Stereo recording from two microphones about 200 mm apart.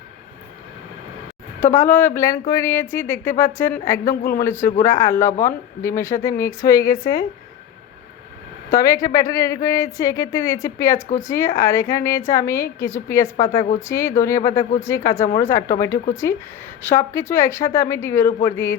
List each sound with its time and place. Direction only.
1.6 s speech: 10° left (ahead or behind)
4.1 s a woman's voice: 45° left (ahead or behind)
4.4 s speech: 10° left (ahead or behind)
6.9 s a woman's voice: 45° left (ahead or behind)
8.7 s speech: 15° left (ahead or behind)